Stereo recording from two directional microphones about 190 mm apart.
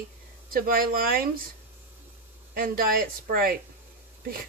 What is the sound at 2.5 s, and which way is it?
Speech, 50° right (ahead or behind).